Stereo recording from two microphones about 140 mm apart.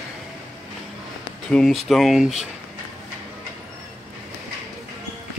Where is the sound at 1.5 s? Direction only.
5° left (ahead or behind).